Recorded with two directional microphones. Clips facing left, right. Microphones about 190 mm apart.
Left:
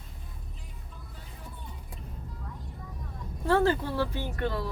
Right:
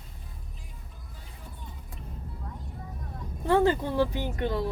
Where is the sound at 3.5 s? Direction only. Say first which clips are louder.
Right 2 dB; 15° right (ahead or behind).